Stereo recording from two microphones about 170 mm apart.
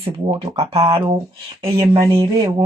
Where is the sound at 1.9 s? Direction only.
20° right (ahead or behind).